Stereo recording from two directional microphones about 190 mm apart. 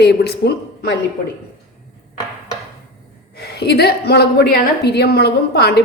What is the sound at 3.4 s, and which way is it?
A woman's voice, 60° left (ahead or behind).